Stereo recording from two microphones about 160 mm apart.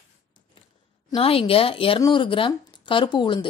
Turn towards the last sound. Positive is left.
turn(degrees=30)  # may be behind; listen again after turning